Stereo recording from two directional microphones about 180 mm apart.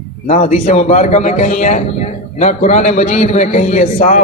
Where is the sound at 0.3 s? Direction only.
40° left (ahead or behind).